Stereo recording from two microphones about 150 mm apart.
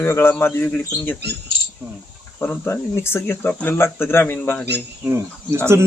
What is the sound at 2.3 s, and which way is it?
Speech, 15° left (ahead or behind).